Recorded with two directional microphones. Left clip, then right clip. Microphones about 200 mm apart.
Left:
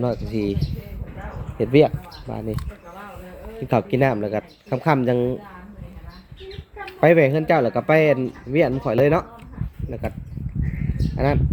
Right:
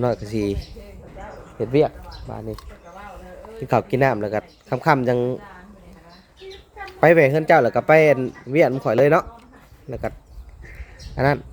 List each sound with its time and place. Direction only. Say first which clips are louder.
0.0 s speech: right 2 dB; 20° right (ahead or behind)
1.5 s speech: left 3 dB; 15° left (ahead or behind)
3.7 s speech: right 1 dB; 5° right (ahead or behind)
6.8 s speech: right 1 dB; 10° right (ahead or behind)
11.2 s speech: right 3 dB; 15° right (ahead or behind)